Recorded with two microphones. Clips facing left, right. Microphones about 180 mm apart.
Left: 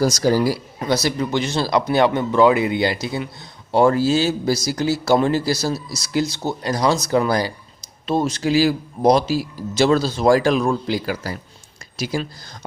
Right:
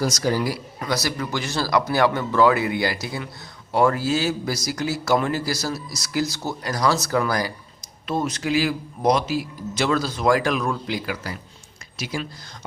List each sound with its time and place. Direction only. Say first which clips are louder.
0.0 s speech: left 5 dB; 35° left (ahead or behind)